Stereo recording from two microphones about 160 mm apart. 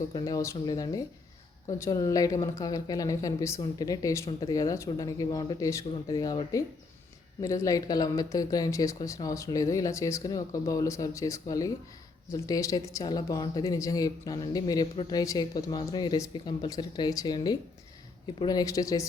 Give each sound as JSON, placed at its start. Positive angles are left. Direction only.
{"t": 0.1, "sound": "speech", "side_deg": 20}